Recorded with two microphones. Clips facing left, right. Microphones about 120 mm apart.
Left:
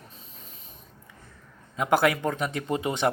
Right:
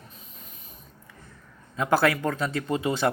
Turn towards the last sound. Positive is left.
turn(degrees=20)  # may be behind; listen again after turning